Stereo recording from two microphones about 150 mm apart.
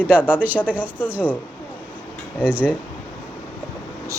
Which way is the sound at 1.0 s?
10° right (ahead or behind).